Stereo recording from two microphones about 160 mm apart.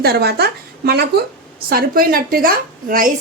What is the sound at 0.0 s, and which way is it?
A woman's voice, 80° right.